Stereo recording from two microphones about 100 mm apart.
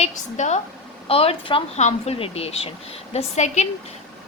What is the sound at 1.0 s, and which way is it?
Speech, 75° left (ahead or behind).